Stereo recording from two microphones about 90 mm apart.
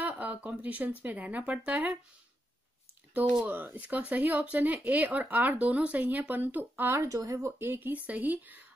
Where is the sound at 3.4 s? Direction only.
20° right (ahead or behind).